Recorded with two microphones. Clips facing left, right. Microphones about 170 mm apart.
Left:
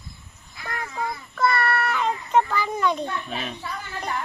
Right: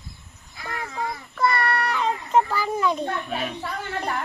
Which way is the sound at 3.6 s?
55° right (ahead or behind).